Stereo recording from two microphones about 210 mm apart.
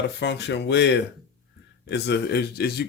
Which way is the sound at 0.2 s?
55° left (ahead or behind).